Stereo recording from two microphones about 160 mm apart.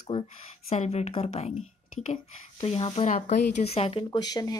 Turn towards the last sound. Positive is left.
turn(degrees=25)  # may be behind; listen again after turning